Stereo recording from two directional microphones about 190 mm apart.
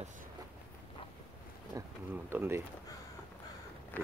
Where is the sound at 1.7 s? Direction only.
20° right (ahead or behind).